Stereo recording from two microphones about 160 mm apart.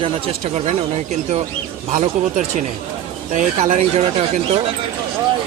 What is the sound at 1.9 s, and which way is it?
Speech, 50° right (ahead or behind).